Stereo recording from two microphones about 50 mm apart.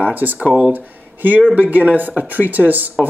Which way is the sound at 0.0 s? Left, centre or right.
Right.